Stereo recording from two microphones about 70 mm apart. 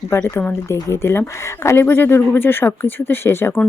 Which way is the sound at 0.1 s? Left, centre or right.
Left.